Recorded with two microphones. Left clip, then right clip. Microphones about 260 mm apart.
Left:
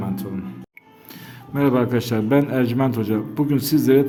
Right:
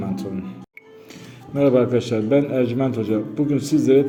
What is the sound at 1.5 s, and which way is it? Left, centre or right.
Speech, left.